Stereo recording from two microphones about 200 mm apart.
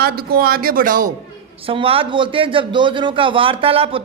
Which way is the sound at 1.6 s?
25° right (ahead or behind).